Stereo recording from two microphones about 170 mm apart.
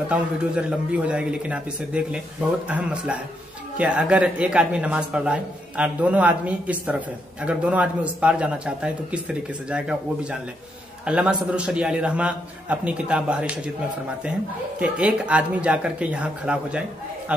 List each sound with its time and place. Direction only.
0.1 s a man's voice: 5° right (ahead or behind)
14.8 s a man's voice: 5° right (ahead or behind)